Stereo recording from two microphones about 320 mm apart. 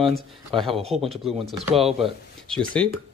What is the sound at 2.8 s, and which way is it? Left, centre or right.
Speech, centre.